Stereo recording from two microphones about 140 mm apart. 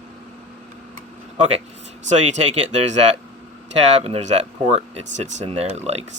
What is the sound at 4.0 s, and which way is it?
Speech, 50° right (ahead or behind).